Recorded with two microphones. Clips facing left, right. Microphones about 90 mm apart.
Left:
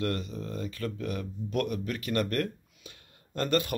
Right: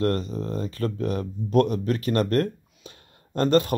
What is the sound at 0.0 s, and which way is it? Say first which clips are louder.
Speech: right 7 dB; 35° right (ahead or behind).